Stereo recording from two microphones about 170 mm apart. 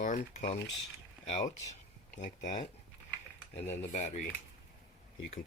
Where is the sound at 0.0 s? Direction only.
50° left (ahead or behind).